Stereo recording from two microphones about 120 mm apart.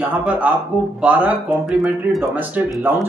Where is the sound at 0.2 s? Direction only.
10° right (ahead or behind).